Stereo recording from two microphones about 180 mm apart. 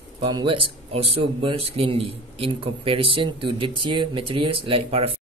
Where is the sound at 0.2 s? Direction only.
25° right (ahead or behind).